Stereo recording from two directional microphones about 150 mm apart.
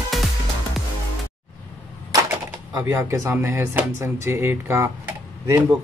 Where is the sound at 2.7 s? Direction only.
20° right (ahead or behind).